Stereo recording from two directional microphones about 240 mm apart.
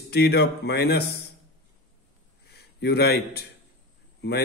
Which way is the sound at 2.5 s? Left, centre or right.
Left.